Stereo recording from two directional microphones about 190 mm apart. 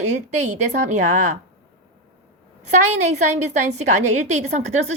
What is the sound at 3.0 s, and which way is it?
A woman's voice, 35° right (ahead or behind).